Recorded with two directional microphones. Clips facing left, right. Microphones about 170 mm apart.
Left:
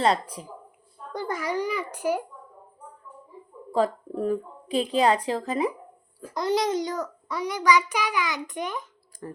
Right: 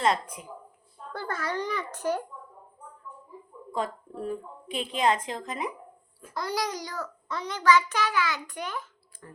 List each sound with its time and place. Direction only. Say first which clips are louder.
0.0 s speech: left 3 dB; 35° left (ahead or behind)
1.1 s a child's voice: left 4 dB; 15° left (ahead or behind)
3.7 s speech: left 8 dB; 35° left (ahead or behind)
6.3 s a child's voice: left 7 dB; 20° left (ahead or behind)